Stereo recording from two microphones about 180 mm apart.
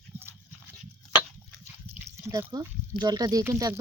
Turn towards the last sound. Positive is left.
turn(degrees=-15)  # may be behind; listen again after turning